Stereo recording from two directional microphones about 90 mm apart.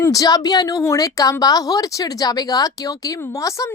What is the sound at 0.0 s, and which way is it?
A woman's voice, 40° left (ahead or behind).